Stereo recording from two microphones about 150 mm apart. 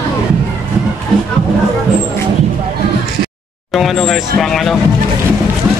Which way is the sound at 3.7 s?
Centre (ahead or behind).